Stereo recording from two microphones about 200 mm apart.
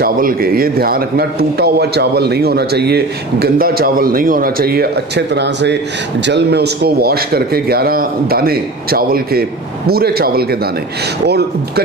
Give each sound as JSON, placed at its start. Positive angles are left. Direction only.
{"t": 0.0, "sound": "a man's voice", "side_deg": -45}